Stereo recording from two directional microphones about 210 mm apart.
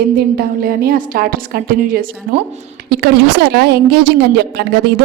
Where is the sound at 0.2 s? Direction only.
45° right (ahead or behind).